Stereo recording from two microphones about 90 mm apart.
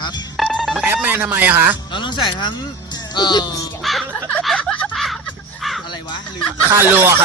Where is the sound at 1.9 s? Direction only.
60° left (ahead or behind).